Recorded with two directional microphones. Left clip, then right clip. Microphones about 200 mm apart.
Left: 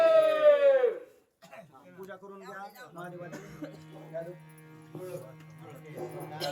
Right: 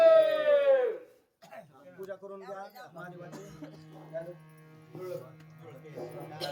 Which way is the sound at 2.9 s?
50° right (ahead or behind).